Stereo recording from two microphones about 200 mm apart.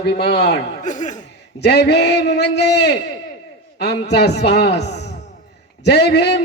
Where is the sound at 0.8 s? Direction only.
40° left (ahead or behind).